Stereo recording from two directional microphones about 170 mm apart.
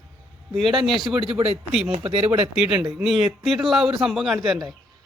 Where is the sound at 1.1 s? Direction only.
30° right (ahead or behind).